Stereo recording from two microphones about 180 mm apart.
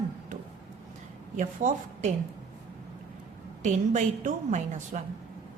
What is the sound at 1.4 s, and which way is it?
Speech, 45° right (ahead or behind).